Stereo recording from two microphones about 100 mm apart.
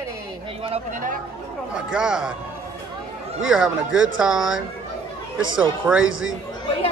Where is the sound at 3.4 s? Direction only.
5° right (ahead or behind).